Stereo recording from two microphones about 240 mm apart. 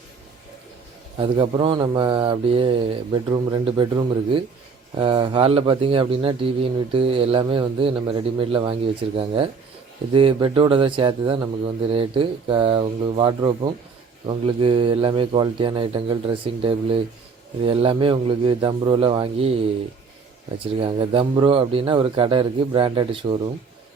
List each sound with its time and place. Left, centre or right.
1.2 s speech: right
20.7 s speech: right